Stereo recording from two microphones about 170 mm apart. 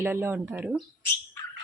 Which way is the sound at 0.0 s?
15° right (ahead or behind).